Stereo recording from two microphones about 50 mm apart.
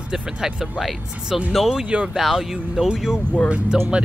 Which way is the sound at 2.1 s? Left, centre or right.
Centre.